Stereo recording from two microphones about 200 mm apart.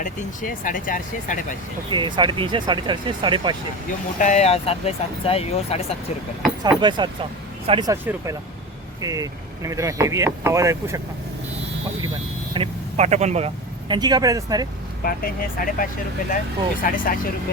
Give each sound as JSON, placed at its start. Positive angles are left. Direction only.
{"t": 0.0, "sound": "speech", "side_deg": 40}
{"t": 1.9, "sound": "speech", "side_deg": -25}
{"t": 4.2, "sound": "speech", "side_deg": 35}
{"t": 6.6, "sound": "speech", "side_deg": -20}
{"t": 12.5, "sound": "speech", "side_deg": -35}
{"t": 15.0, "sound": "speech", "side_deg": 45}